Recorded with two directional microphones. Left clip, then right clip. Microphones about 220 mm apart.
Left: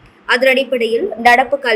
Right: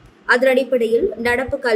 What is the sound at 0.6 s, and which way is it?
Speech, 30° right (ahead or behind).